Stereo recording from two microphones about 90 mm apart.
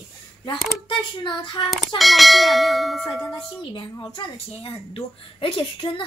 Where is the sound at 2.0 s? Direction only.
Centre (ahead or behind).